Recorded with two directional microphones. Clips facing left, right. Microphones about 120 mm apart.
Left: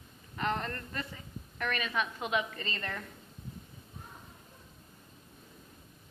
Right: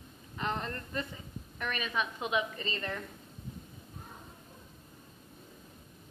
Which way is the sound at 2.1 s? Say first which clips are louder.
Even; 20° right (ahead or behind).